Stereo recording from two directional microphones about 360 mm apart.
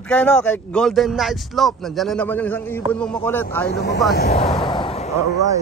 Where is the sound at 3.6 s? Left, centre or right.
Left.